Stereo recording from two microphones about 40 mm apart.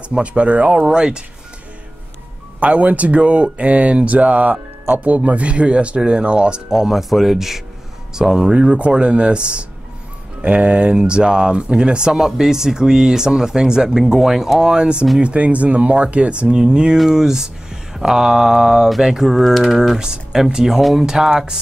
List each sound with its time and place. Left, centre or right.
0.1 s speech: right
0.8 s speech: centre
2.6 s speech: right
6.8 s speech: centre
8.7 s speech: right
12.1 s speech: centre
15.1 s speech: right
16.4 s speech: centre
19.3 s typing: centre
19.6 s speech: centre